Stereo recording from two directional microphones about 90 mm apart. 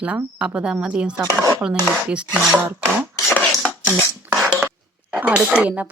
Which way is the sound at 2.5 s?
25° right (ahead or behind).